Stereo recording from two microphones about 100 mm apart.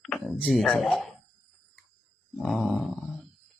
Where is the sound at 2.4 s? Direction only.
Centre (ahead or behind).